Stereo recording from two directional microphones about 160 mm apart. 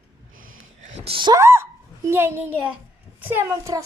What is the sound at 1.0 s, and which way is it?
Speech, 30° right (ahead or behind).